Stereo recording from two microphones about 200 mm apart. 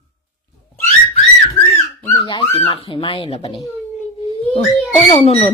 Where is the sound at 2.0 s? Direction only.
15° left (ahead or behind).